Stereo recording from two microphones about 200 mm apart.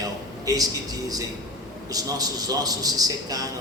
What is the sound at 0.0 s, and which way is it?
A man's voice, 15° right (ahead or behind).